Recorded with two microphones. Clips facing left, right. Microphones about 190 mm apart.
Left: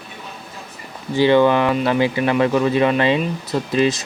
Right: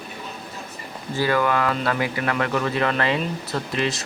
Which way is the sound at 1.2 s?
25° left (ahead or behind).